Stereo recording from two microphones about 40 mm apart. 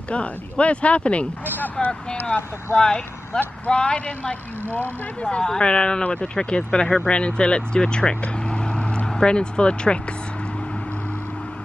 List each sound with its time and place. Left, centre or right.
0.1 s speech: left
1.8 s speech: centre
2.2 s speech: left
3.6 s speech: left
8.5 s vehicle: left
9.1 s speech: left